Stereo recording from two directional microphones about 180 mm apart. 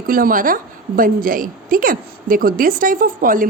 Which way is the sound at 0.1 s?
50° right (ahead or behind).